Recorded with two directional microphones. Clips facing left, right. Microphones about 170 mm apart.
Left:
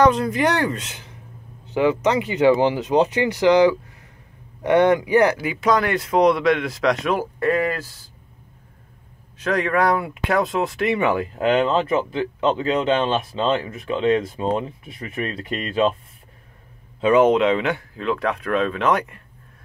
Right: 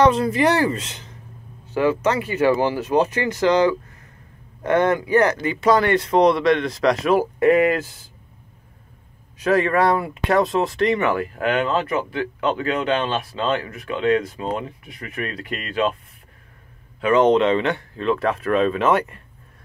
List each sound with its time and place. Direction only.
0.0 s speech: centre (ahead or behind)
1.7 s speech: 15° left (ahead or behind); by 7.2 s 5° right (ahead or behind)
7.3 s speech: 20° right (ahead or behind)
9.4 s speech: 5° right (ahead or behind)
11.0 s speech: 15° left (ahead or behind)
17.0 s speech: 10° left (ahead or behind)